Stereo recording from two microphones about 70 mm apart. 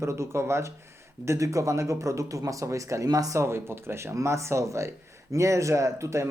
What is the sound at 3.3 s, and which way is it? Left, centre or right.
Speech, right.